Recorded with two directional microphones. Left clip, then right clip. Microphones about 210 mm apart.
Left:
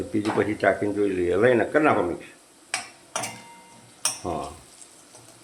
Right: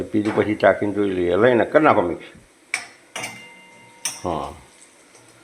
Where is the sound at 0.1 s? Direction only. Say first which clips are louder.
Right 4 dB; 15° right (ahead or behind).